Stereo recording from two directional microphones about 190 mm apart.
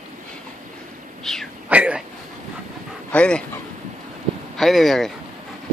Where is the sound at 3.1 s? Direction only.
5° left (ahead or behind).